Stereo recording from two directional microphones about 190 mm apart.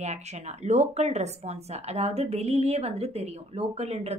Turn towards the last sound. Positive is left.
turn(degrees=-35)  # may be behind; listen again after turning